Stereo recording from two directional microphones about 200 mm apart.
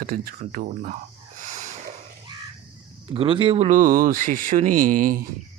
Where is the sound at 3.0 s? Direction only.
25° right (ahead or behind); by 5.2 s 40° right (ahead or behind).